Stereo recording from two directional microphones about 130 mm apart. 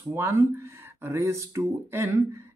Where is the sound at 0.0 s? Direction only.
20° right (ahead or behind).